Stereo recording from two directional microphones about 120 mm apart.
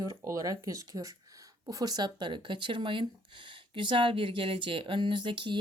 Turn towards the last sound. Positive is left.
turn(degrees=-40)  # may be behind; listen again after turning